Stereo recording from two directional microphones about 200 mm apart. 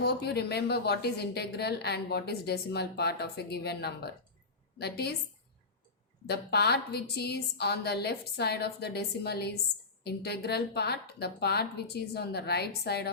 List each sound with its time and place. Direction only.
0.0 s a woman's voice: 55° left (ahead or behind)
6.2 s a woman's voice: 55° left (ahead or behind)